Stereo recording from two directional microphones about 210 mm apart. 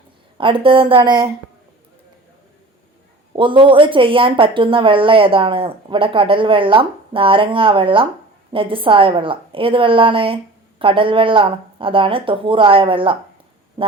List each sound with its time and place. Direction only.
0.3 s a woman's voice: 25° right (ahead or behind)
3.3 s a woman's voice: 25° right (ahead or behind)
13.8 s a sound: 25° right (ahead or behind)